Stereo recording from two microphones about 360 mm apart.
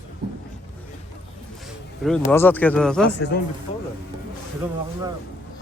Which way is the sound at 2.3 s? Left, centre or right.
Centre.